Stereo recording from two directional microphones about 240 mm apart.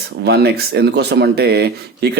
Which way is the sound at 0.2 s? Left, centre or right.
Right.